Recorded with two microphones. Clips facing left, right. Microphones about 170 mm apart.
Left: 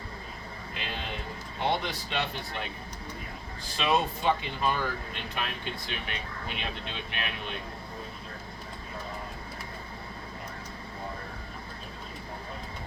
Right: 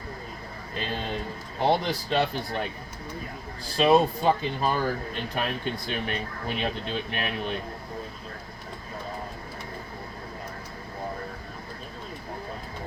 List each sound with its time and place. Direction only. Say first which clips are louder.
1.5 s speech: right 6 dB; 40° right (ahead or behind)
3.8 s speech: right 7 dB; 35° right (ahead or behind)